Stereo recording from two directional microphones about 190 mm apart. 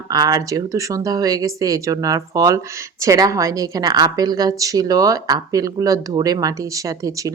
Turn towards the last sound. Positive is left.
turn(degrees=-20)  # may be behind; listen again after turning